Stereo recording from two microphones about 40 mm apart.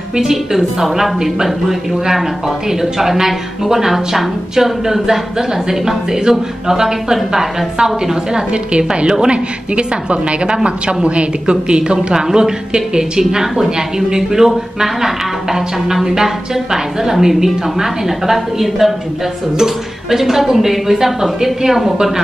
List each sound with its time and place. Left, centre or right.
0.2 s a woman's voice: centre